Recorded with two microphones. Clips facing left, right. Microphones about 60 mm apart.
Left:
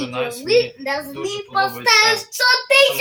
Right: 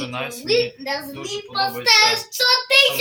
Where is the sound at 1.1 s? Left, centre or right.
Centre.